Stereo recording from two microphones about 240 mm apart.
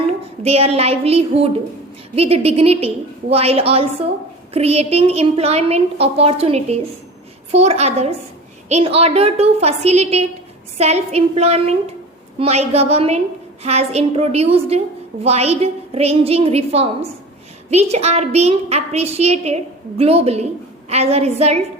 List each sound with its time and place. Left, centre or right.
0.4 s a woman's voice: right